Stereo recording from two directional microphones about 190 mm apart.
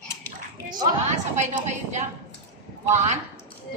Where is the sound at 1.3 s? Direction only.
40° right (ahead or behind).